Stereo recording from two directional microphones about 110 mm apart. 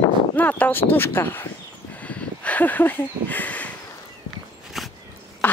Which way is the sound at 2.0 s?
15° left (ahead or behind).